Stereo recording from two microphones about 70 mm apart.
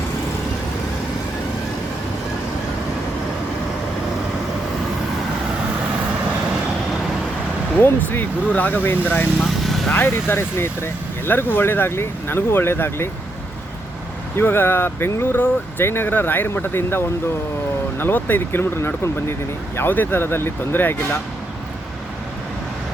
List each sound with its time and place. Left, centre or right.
7.8 s speech: left
9.4 s vehicle: centre
9.9 s speech: left
14.3 s speech: left